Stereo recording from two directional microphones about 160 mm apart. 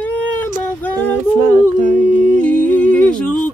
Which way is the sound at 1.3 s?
60° right (ahead or behind).